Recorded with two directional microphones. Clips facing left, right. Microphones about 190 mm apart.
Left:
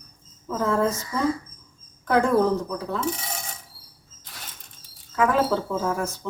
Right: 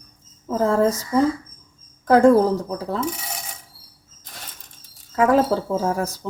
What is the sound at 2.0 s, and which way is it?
Speech, 35° right (ahead or behind).